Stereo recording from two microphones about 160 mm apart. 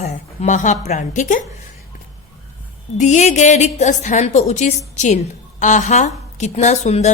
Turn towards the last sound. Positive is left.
turn(degrees=45)  # may be behind; listen again after turning